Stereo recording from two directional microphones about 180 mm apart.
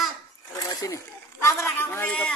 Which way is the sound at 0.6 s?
20° left (ahead or behind).